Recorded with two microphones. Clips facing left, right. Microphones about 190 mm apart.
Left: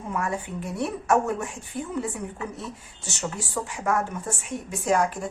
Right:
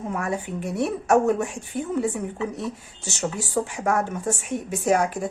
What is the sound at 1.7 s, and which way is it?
Speech, 50° right (ahead or behind).